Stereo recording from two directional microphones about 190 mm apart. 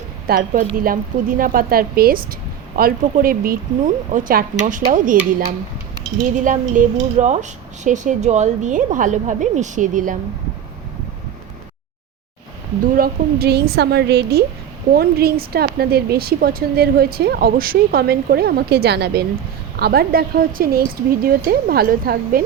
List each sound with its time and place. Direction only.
0.3 s a woman's voice: 50° right (ahead or behind)
6.3 s a woman's voice: 45° right (ahead or behind)
13.0 s a woman's voice: 55° right (ahead or behind)